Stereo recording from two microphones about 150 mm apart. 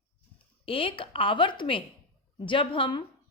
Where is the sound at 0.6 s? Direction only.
35° left (ahead or behind).